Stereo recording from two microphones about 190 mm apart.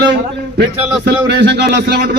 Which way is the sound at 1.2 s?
65° right (ahead or behind).